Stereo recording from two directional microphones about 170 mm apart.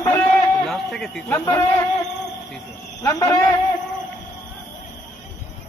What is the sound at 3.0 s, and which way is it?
Speech, 20° left (ahead or behind).